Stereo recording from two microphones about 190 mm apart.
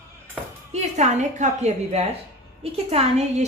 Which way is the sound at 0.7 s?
40° right (ahead or behind).